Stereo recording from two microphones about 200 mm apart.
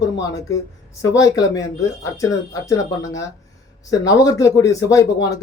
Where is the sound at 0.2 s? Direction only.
15° left (ahead or behind).